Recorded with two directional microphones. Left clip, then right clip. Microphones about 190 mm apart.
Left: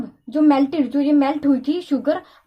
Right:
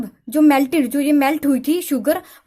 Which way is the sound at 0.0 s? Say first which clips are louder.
Right 2 dB; 35° right (ahead or behind).